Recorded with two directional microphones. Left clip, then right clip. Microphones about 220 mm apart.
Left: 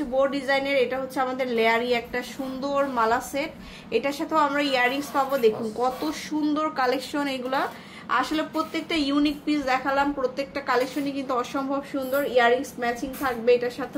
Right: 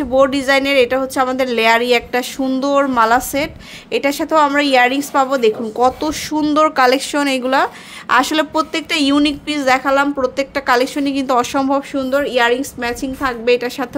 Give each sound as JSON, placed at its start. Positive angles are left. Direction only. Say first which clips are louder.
{"t": 0.1, "sound": "a woman's voice", "louder": "right 10 dB", "side_deg": -55}